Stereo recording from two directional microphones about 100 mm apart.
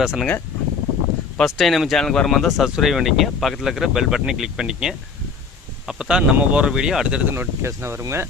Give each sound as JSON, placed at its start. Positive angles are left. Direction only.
{"t": 0.0, "sound": "speech", "side_deg": -5}
{"t": 1.4, "sound": "speech", "side_deg": 0}
{"t": 7.3, "sound": "speech", "side_deg": -25}